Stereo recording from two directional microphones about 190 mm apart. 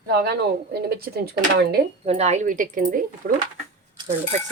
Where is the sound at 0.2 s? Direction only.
55° right (ahead or behind).